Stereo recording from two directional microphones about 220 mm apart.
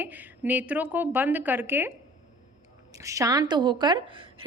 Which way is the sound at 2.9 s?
15° right (ahead or behind).